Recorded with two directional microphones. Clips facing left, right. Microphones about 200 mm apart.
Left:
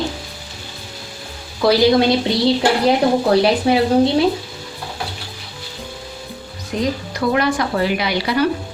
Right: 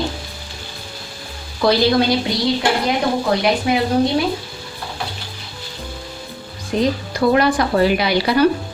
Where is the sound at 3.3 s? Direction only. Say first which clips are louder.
Left 1 dB; 30° left (ahead or behind).